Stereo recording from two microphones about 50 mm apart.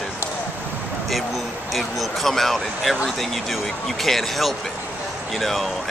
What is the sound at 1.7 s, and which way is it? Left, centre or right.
Speech, centre.